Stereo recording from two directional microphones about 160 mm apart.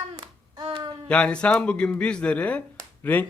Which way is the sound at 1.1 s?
5° left (ahead or behind).